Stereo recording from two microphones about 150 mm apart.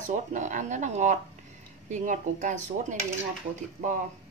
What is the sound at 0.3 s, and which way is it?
A woman's voice, 55° right (ahead or behind).